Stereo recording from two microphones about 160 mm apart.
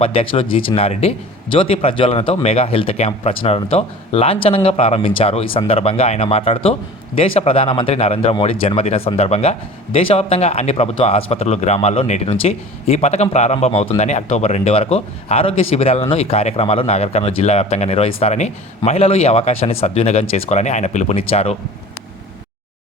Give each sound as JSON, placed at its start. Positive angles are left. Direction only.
{"t": 0.0, "sound": "speech", "side_deg": 35}